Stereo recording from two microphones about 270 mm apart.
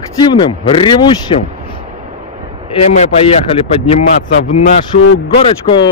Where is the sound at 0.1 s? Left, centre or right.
Centre.